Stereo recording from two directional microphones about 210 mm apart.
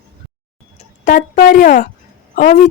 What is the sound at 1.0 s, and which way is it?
Speech, 40° left (ahead or behind).